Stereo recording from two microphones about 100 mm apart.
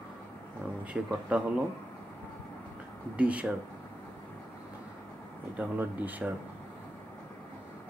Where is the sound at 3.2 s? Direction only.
15° right (ahead or behind).